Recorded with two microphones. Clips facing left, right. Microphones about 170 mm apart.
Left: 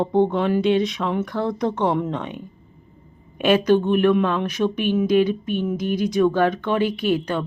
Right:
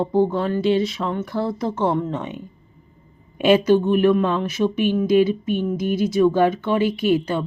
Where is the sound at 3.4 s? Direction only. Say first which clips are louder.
Right 1 dB; 10° right (ahead or behind).